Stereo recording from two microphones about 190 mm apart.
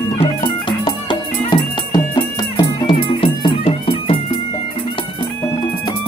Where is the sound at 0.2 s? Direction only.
25° left (ahead or behind).